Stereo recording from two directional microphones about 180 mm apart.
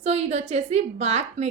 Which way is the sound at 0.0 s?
35° right (ahead or behind).